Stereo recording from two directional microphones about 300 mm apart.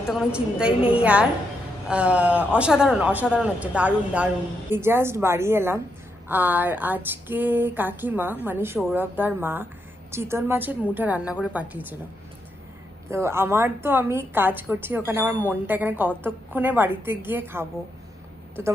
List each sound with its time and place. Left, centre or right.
0.0 s a man's voice: centre
13.1 s speech: centre